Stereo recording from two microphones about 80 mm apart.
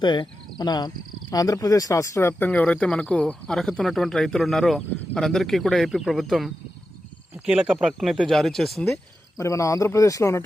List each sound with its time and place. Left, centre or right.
0.0 s speech: left
0.6 s speech: left
2.4 s speech: centre
7.4 s speech: centre
9.4 s speech: left